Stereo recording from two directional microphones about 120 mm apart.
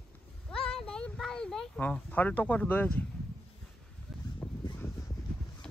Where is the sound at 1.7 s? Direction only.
15° left (ahead or behind).